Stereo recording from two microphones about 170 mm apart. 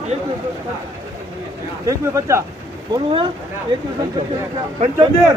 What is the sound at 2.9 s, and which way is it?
Speech, 30° right (ahead or behind).